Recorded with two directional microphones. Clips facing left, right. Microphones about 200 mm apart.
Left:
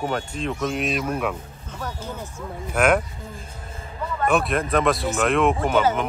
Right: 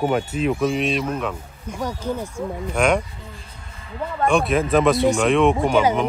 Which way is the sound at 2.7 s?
5° left (ahead or behind).